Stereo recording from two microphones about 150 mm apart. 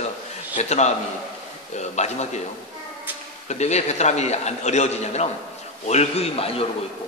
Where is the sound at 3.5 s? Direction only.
50° left (ahead or behind).